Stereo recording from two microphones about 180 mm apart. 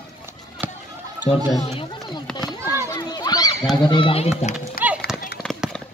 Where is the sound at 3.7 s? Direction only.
25° left (ahead or behind).